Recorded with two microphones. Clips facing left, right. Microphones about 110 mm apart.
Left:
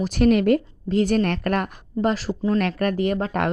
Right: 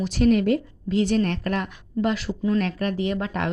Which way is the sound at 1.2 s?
60° left (ahead or behind).